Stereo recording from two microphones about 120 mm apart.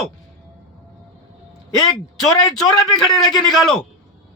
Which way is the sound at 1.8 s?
30° left (ahead or behind).